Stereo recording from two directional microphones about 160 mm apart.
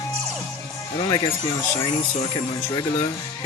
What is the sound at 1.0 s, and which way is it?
Speech, 25° left (ahead or behind).